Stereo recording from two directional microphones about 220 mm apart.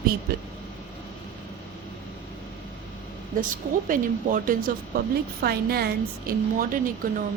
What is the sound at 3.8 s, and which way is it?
A woman's voice, 40° right (ahead or behind).